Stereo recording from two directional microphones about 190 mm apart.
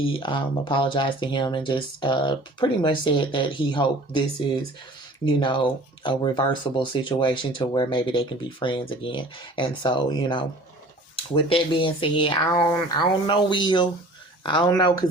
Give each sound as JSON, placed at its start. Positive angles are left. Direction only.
{"t": 0.0, "sound": "speech", "side_deg": 25}
{"t": 5.2, "sound": "speech", "side_deg": 25}